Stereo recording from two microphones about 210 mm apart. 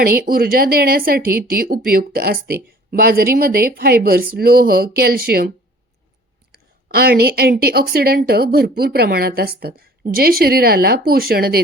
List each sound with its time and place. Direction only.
0.0 s speech: 45° right (ahead or behind)
6.5 s speech: 50° right (ahead or behind)